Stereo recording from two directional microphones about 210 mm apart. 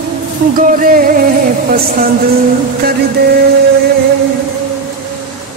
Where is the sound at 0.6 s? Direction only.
40° right (ahead or behind).